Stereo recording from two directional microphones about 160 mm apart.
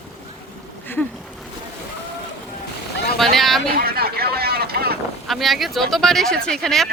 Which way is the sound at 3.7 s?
70° right (ahead or behind).